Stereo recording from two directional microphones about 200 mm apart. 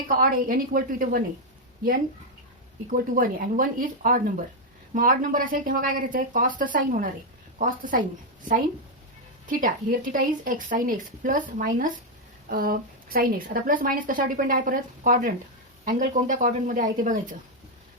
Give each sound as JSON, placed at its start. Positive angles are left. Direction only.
{"t": 0.1, "sound": "a woman's voice", "side_deg": -45}
{"t": 2.9, "sound": "a woman's voice", "side_deg": -45}
{"t": 9.5, "sound": "a woman's voice", "side_deg": -40}